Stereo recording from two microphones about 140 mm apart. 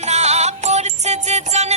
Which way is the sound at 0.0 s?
50° right (ahead or behind).